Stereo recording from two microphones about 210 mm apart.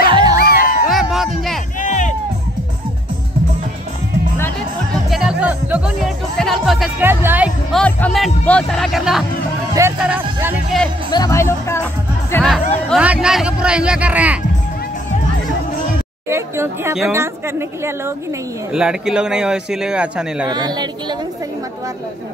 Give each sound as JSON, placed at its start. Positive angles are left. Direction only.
{"t": 0.1, "sound": "music", "side_deg": -20}
{"t": 0.4, "sound": "music", "side_deg": 45}
{"t": 0.8, "sound": "music", "side_deg": 0}
{"t": 1.8, "sound": "music", "side_deg": 35}
{"t": 5.1, "sound": "music", "side_deg": -5}
{"t": 7.8, "sound": "speech", "side_deg": 5}
{"t": 11.1, "sound": "speech", "side_deg": 15}
{"t": 12.9, "sound": "speech", "side_deg": -5}
{"t": 16.3, "sound": "speech", "side_deg": -10}
{"t": 20.4, "sound": "a woman's voice", "side_deg": -20}